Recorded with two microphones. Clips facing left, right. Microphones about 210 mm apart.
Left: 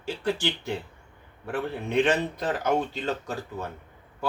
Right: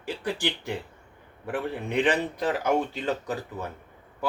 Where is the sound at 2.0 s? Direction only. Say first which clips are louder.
Even; 15° right (ahead or behind).